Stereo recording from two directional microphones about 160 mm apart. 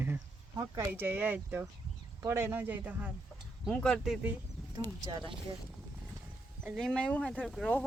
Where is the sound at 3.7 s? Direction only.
5° left (ahead or behind).